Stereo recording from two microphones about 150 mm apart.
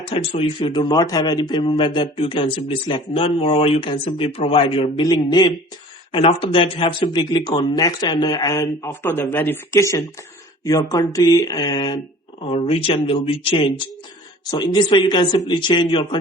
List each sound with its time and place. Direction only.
0.0 s speech: 40° left (ahead or behind)
12.5 s speech: 40° left (ahead or behind)